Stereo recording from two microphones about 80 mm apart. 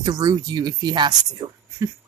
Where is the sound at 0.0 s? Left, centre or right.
Right.